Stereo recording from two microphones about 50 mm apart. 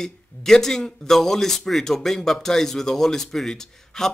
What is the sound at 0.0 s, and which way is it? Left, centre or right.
Speech, centre.